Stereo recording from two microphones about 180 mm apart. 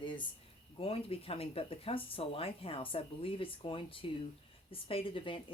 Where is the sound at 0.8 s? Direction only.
30° left (ahead or behind).